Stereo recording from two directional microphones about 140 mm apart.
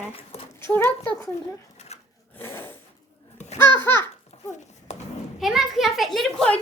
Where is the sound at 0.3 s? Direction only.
50° left (ahead or behind).